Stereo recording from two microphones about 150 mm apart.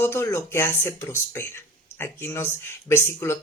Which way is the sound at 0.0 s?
15° left (ahead or behind).